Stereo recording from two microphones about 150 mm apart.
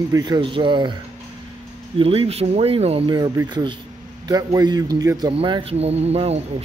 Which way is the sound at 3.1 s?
25° right (ahead or behind).